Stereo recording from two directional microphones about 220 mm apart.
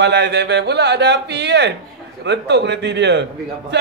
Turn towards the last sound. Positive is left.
turn(degrees=-50)  # may be behind; listen again after turning